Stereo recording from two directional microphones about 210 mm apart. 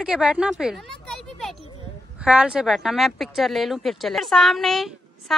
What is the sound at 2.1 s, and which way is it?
A woman's voice, 5° right (ahead or behind).